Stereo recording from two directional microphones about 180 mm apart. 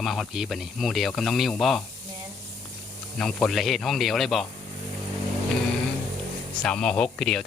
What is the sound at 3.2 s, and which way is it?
Speech, 5° left (ahead or behind).